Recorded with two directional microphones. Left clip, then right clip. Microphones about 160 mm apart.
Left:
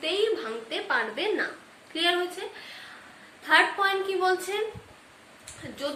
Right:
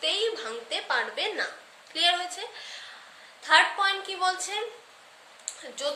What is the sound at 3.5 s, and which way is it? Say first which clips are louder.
A woman's voice: even; 25° right (ahead or behind).